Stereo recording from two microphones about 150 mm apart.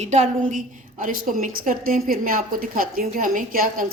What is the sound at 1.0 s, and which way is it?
A woman's voice, 65° right (ahead or behind).